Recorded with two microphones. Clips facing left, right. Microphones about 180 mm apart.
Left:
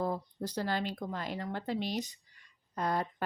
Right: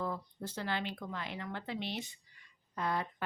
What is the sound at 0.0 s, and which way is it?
Speech, 35° left (ahead or behind).